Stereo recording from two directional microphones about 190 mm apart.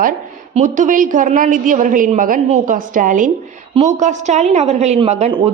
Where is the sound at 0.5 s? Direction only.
40° right (ahead or behind).